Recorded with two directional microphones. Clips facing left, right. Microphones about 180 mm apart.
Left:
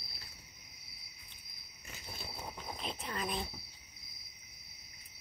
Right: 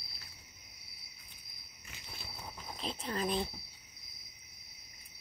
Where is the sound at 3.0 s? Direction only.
35° right (ahead or behind).